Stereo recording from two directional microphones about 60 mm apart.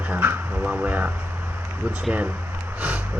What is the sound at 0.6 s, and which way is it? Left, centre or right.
Speech, centre.